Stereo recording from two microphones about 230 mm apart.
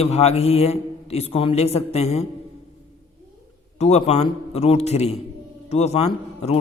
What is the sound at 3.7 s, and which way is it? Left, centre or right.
A man's voice, left.